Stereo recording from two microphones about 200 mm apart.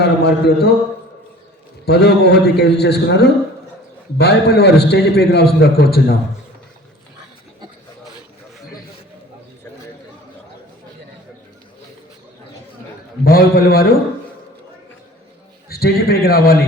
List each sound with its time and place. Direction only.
0.0 s a man's voice: 55° left (ahead or behind)
1.8 s a man's voice: 55° left (ahead or behind)
13.2 s a man's voice: 50° left (ahead or behind)
15.7 s a man's voice: 50° left (ahead or behind)